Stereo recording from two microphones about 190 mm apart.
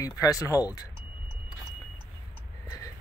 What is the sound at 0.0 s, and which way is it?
Speech, 20° left (ahead or behind).